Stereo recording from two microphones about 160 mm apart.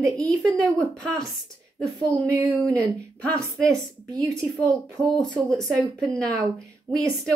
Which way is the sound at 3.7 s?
20° right (ahead or behind).